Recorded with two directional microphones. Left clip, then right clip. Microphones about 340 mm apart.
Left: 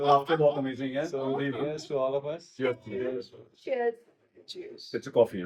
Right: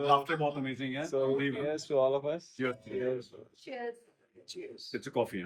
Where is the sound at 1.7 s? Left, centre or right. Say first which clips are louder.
Right 4 dB; right.